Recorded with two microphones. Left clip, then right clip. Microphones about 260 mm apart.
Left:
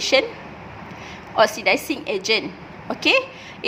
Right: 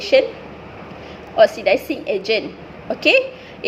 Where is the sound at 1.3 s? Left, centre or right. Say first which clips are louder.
Right 4 dB; left.